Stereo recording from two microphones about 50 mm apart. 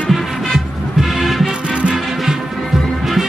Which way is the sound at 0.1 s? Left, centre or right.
Centre.